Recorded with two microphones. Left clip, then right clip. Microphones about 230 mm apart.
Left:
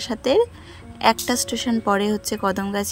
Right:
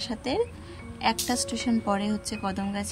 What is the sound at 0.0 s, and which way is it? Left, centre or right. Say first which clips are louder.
A woman's voice: left 9 dB; centre.